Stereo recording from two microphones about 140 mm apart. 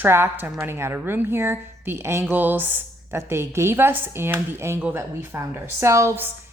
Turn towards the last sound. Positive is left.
turn(degrees=-15)  # may be behind; listen again after turning